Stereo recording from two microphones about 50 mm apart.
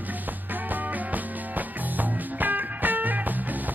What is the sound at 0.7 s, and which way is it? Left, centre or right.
Music, right.